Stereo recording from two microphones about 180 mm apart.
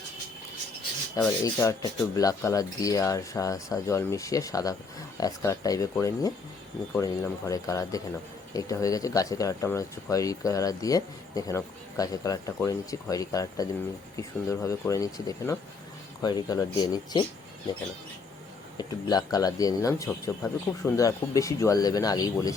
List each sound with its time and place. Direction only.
1.1 s speech: 15° left (ahead or behind)
18.8 s speech: 20° left (ahead or behind)